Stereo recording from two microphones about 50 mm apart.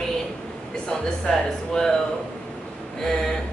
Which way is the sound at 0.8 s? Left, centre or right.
Centre.